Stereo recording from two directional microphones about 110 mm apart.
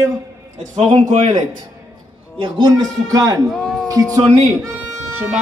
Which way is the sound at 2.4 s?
40° right (ahead or behind).